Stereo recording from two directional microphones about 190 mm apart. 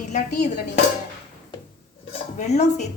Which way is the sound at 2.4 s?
35° left (ahead or behind).